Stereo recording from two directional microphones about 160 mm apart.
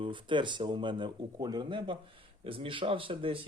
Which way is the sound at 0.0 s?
30° right (ahead or behind).